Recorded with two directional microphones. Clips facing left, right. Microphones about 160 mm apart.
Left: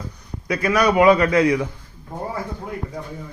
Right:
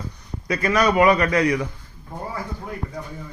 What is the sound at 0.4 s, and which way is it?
A man's voice, 5° left (ahead or behind).